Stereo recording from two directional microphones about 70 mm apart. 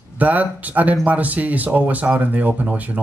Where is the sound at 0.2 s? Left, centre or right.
Right.